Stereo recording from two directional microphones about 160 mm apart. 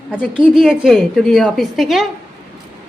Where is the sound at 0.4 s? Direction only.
5° right (ahead or behind).